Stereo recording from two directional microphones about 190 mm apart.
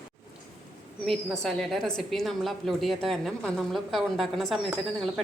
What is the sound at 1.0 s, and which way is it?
A woman's voice, centre (ahead or behind).